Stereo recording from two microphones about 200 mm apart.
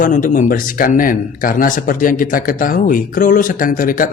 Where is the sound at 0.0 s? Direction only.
40° left (ahead or behind).